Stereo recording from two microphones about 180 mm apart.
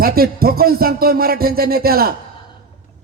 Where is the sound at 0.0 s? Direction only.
55° right (ahead or behind).